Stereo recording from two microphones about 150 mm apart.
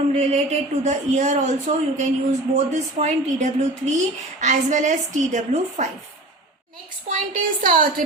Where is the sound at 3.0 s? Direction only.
50° right (ahead or behind).